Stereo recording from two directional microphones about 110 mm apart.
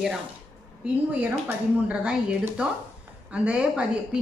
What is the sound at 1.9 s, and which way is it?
Speech, 10° right (ahead or behind).